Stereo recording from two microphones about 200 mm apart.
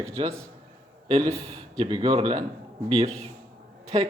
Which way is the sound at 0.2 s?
25° right (ahead or behind).